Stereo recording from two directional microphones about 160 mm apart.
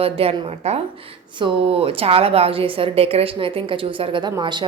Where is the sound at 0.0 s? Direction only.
35° right (ahead or behind).